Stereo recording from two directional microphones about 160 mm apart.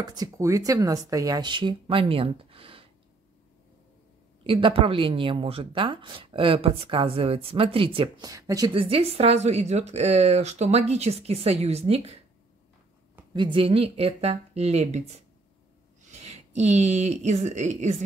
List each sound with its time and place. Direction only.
0.0 s speech: 25° right (ahead or behind)
4.4 s speech: 35° right (ahead or behind)
8.3 s speech: 20° right (ahead or behind)
8.8 s speech: 40° right (ahead or behind)
13.3 s speech: 30° right (ahead or behind); by 17.9 s 45° right (ahead or behind)